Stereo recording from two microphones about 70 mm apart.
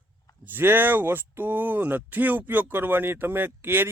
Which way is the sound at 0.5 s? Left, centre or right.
Right.